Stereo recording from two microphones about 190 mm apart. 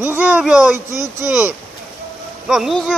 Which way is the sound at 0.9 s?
20° left (ahead or behind).